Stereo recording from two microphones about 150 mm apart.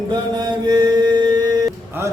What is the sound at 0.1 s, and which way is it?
Chant, 30° right (ahead or behind).